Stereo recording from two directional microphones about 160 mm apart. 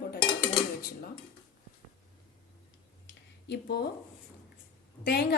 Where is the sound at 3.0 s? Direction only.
90° left.